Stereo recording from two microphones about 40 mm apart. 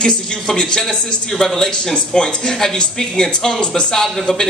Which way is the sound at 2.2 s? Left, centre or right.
Left.